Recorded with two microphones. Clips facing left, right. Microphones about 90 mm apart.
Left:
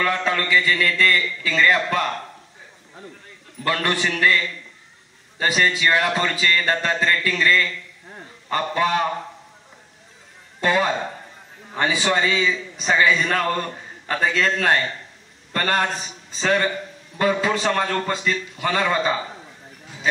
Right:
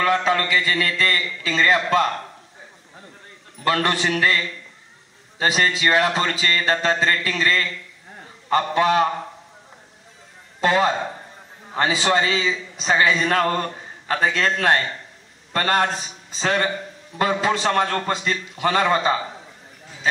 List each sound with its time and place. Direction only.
0.0 s speech: 25° right (ahead or behind)
3.6 s speech: 20° right (ahead or behind)
5.4 s speech: 25° right (ahead or behind)
10.6 s a man's voice: 25° right (ahead or behind)